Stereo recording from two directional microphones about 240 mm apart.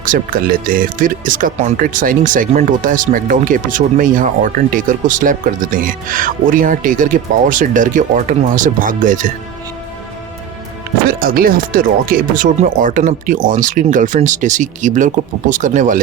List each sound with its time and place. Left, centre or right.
0.0 s speech: right
11.1 s speech: right